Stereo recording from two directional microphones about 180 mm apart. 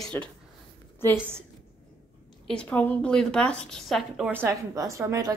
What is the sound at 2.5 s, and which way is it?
A woman's voice, 5° left (ahead or behind).